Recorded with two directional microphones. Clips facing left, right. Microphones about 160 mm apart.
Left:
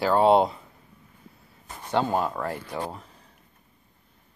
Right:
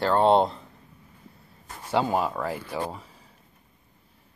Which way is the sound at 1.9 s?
5° right (ahead or behind).